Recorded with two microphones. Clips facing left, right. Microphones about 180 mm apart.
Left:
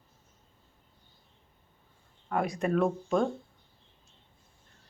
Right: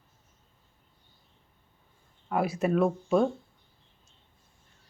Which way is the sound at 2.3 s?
5° right (ahead or behind).